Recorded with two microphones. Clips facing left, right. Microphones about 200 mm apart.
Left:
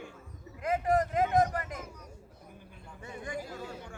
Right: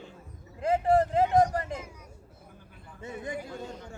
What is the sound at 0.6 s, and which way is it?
Speech, 30° right (ahead or behind).